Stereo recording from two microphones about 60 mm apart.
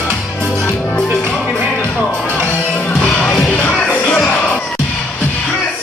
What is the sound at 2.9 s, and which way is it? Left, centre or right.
Music, centre.